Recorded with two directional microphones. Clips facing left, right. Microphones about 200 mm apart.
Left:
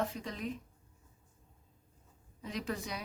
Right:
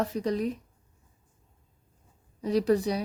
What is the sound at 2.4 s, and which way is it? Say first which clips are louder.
Speech: right 14 dB; 40° right (ahead or behind).